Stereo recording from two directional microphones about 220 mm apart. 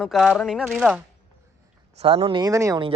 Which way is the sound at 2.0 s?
25° right (ahead or behind).